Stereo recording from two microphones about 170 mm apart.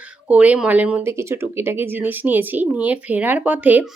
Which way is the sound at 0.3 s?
10° right (ahead or behind).